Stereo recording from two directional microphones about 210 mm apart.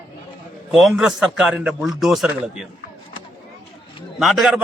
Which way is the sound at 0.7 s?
Centre (ahead or behind).